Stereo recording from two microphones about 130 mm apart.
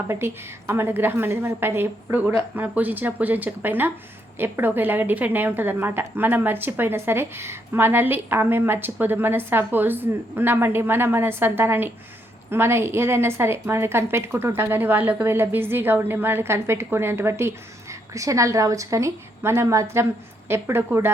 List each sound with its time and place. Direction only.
0.1 s a woman's voice: 20° right (ahead or behind)